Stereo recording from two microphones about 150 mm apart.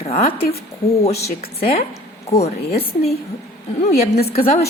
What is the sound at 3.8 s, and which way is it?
Speech, 50° left (ahead or behind).